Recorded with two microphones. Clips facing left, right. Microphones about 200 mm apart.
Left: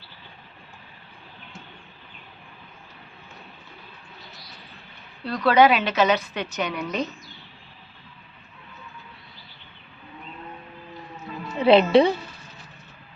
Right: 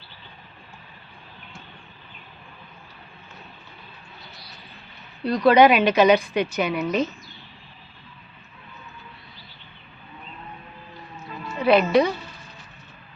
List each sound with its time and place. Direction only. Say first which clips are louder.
5.2 s a woman's voice: right 3 dB; 15° right (ahead or behind)
11.6 s speech: left 2 dB; 25° left (ahead or behind)